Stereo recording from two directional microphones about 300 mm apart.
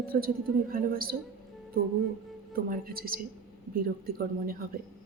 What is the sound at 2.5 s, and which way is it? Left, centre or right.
Speech, right.